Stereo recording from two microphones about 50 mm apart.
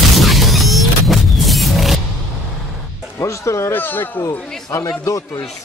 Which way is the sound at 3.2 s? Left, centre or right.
Left.